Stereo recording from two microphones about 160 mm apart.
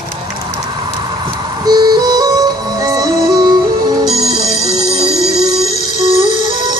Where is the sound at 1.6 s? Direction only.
25° right (ahead or behind).